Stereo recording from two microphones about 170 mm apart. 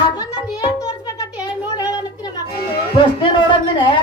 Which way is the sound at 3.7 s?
25° left (ahead or behind).